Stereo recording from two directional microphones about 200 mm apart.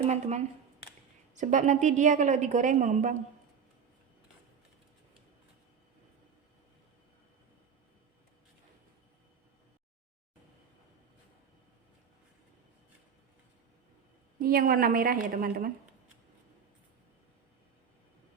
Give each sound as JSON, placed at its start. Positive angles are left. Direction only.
{"t": 0.1, "sound": "a woman's voice", "side_deg": -35}
{"t": 14.4, "sound": "a woman's voice", "side_deg": -45}